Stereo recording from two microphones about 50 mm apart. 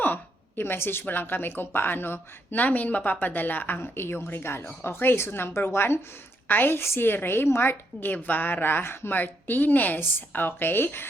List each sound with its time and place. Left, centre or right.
0.0 s a sound: left
0.6 s speech: left
3.8 s a woman's voice: left
6.5 s a woman's voice: left
6.8 s a woman's voice: left